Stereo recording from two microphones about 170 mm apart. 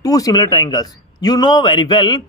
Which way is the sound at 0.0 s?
20° left (ahead or behind).